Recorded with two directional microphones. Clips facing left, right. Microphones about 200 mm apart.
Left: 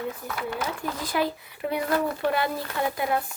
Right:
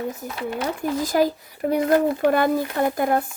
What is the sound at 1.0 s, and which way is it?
Speech, 45° right (ahead or behind).